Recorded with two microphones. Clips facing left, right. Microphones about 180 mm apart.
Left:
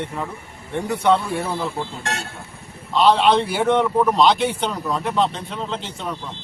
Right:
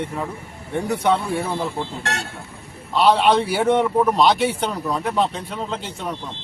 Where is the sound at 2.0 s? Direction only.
70° right (ahead or behind).